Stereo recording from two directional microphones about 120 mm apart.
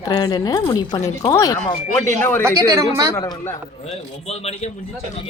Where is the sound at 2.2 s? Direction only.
20° left (ahead or behind).